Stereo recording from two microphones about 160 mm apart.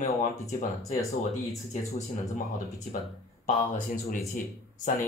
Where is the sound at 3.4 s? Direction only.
60° left (ahead or behind).